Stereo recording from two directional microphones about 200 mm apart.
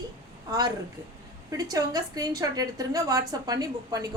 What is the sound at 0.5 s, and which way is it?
A woman's voice, 20° right (ahead or behind).